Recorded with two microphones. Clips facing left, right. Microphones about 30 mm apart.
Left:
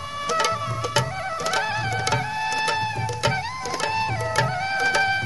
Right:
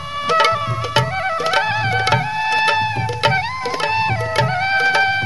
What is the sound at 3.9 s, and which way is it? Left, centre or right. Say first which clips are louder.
Music: right 5 dB; right.